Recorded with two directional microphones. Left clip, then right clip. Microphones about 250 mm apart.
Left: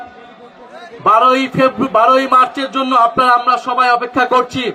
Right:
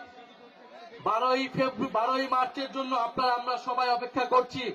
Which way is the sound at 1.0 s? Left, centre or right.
Left.